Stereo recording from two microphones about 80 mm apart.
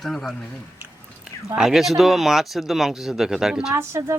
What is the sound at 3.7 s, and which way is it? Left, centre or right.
Speech, right.